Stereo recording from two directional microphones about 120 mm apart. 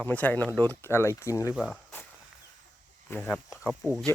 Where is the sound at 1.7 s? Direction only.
15° left (ahead or behind).